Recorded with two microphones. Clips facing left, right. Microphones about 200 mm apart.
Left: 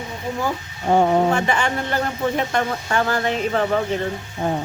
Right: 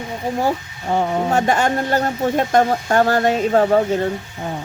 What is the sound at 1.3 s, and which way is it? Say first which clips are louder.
Speech: right 3 dB; 40° right (ahead or behind).